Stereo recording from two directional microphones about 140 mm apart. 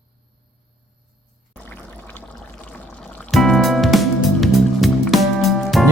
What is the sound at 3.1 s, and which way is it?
Music, 5° left (ahead or behind).